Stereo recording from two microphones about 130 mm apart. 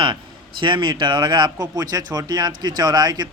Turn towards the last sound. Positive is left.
turn(degrees=-30)  # may be behind; listen again after turning